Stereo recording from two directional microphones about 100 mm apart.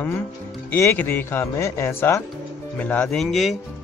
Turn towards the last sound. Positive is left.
turn(degrees=0)  # may be behind; listen again after turning